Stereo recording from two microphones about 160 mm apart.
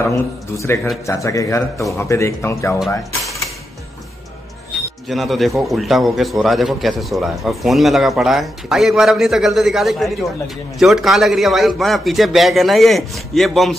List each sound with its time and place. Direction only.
0.0 s speech: 15° left (ahead or behind)
5.0 s a man's voice: centre (ahead or behind)